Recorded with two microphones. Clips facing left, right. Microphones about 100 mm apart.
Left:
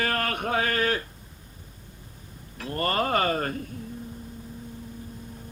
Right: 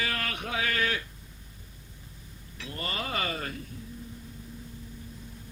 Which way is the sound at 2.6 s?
50° left (ahead or behind).